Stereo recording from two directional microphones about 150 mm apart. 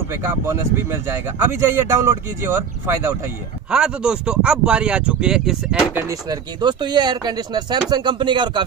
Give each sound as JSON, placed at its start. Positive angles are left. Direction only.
{"t": 0.1, "sound": "speech", "side_deg": -15}
{"t": 3.7, "sound": "speech", "side_deg": -5}
{"t": 6.0, "sound": "speech", "side_deg": -25}